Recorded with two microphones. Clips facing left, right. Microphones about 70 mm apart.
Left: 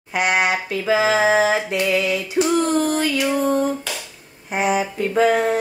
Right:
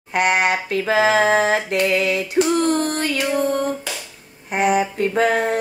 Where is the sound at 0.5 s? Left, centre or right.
Right.